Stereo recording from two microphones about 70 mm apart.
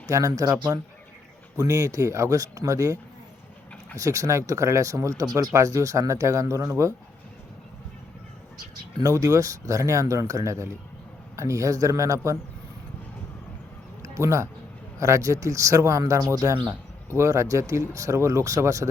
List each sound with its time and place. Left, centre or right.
0.1 s speech: right
9.1 s speech: right
14.0 s a sound: right
14.9 s speech: right